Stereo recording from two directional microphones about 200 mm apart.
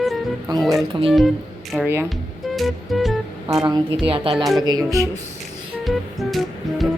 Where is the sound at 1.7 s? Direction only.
10° right (ahead or behind).